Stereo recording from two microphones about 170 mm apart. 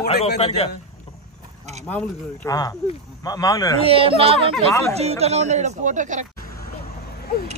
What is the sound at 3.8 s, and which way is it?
A man's voice, 35° right (ahead or behind).